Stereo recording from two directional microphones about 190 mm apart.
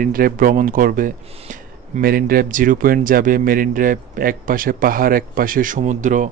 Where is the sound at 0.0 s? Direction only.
50° right (ahead or behind).